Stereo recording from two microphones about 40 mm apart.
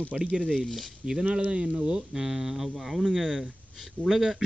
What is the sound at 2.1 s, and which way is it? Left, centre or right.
Speech, centre.